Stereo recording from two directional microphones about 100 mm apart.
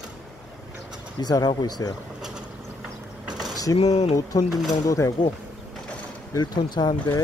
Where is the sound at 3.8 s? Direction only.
90° left.